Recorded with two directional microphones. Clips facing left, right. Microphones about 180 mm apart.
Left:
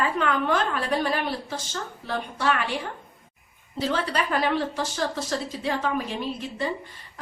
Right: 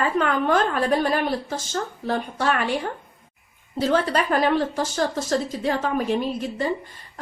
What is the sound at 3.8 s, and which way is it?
A woman's voice, 45° right (ahead or behind).